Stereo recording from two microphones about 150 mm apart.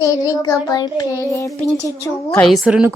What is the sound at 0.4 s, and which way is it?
A child's voice, 25° left (ahead or behind).